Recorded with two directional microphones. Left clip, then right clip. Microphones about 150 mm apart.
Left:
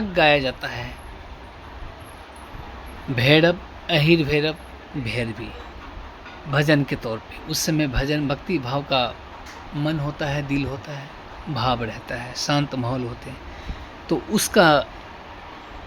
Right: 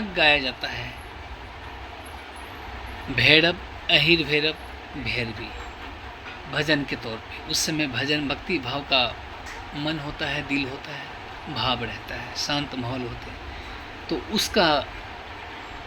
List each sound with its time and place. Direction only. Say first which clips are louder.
0.1 s speech: left 2 dB; 70° left (ahead or behind)
3.2 s speech: left 1 dB; 60° left (ahead or behind)
6.5 s speech: left 4 dB; 75° left (ahead or behind)
14.1 s speech: left 3 dB; 90° left